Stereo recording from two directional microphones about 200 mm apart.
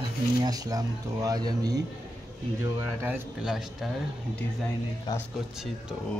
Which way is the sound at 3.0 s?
5° right (ahead or behind).